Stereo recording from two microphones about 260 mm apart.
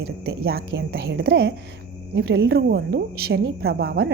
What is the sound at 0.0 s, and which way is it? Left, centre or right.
Speech, right.